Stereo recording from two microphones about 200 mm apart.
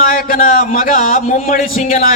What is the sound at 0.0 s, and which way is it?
Speech, 45° left (ahead or behind).